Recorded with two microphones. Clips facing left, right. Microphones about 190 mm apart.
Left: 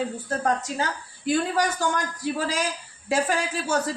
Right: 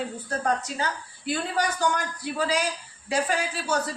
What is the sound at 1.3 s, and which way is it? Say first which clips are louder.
Speech: left 4 dB; 45° left (ahead or behind).